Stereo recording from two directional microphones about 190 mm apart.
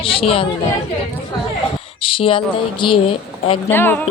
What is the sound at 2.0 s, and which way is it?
Speech, 25° left (ahead or behind).